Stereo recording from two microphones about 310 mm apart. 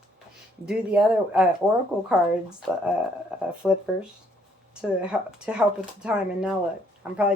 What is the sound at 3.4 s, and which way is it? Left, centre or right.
Speech, centre.